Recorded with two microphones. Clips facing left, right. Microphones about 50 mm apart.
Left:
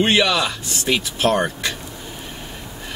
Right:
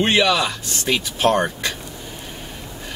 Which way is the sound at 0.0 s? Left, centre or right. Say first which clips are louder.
Even; centre.